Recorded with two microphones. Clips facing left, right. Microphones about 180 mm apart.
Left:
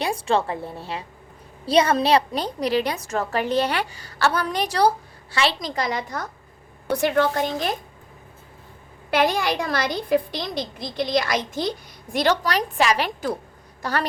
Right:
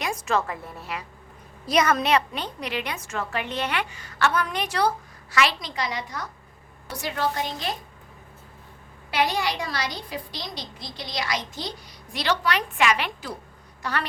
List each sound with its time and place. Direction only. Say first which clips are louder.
0.0 s a woman's voice: left 4 dB; 30° left (ahead or behind)
5.5 s a woman's voice: left 5 dB; 45° left (ahead or behind)
9.0 s a woman's voice: left 4 dB; 50° left (ahead or behind)